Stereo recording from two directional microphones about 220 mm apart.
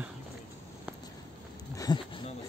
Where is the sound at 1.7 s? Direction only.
20° left (ahead or behind).